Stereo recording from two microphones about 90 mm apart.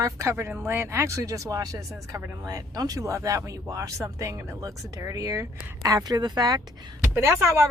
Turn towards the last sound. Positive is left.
turn(degrees=-30)  # may be behind; listen again after turning